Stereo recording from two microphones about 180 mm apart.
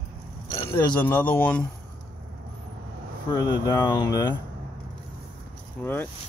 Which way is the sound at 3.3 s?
20° left (ahead or behind).